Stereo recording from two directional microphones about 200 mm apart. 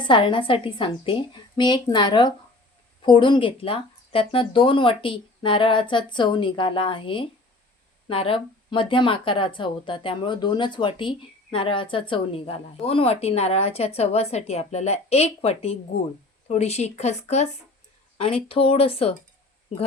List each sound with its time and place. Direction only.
0.0 s a woman's voice: 25° left (ahead or behind)